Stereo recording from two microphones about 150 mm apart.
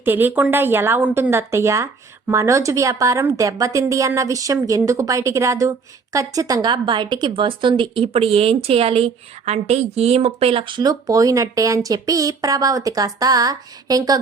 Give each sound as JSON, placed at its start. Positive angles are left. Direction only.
{"t": 0.0, "sound": "speech", "side_deg": -15}